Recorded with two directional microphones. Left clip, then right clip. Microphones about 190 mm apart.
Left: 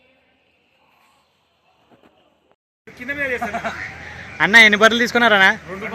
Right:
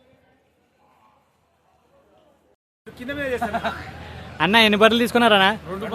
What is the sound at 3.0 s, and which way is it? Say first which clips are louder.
Speech: left 4 dB; 10° right (ahead or behind).